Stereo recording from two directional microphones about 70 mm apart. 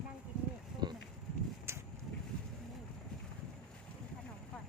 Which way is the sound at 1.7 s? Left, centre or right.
Right.